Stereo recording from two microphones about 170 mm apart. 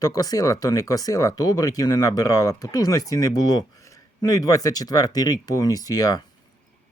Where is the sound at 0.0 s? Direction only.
20° left (ahead or behind).